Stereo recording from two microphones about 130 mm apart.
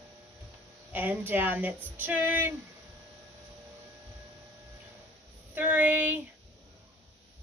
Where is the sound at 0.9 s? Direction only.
15° right (ahead or behind).